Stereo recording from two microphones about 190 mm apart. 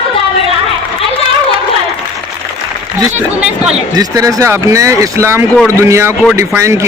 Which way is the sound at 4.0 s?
15° right (ahead or behind).